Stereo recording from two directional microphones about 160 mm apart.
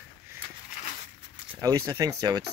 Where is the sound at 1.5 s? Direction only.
20° right (ahead or behind).